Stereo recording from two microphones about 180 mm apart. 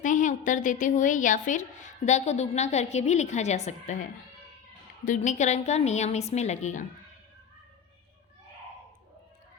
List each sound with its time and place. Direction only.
0.0 s a woman's voice: 45° left (ahead or behind)